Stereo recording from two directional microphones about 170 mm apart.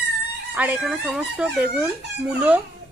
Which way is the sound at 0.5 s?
10° right (ahead or behind).